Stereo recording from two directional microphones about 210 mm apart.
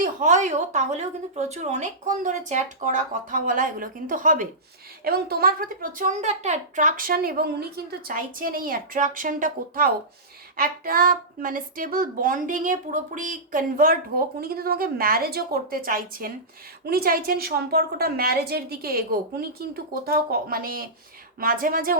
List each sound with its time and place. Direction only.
0.0 s a woman's voice: 35° right (ahead or behind)